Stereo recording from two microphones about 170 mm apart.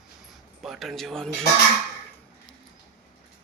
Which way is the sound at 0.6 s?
Centre (ahead or behind).